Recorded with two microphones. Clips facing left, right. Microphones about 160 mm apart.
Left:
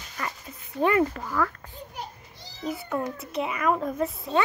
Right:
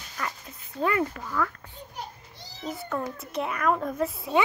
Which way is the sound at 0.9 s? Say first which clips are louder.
Left 3 dB; 40° left (ahead or behind).